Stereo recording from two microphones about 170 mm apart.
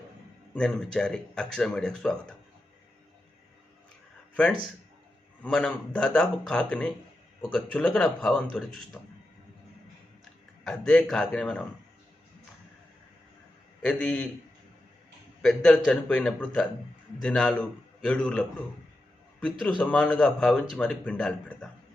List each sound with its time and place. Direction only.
0.5 s speech: 5° left (ahead or behind)
5.4 s speech: 5° left (ahead or behind)
10.6 s speech: 5° left (ahead or behind)
13.8 s speech: 5° left (ahead or behind)
15.4 s speech: 5° left (ahead or behind)
19.8 s speech: 10° left (ahead or behind)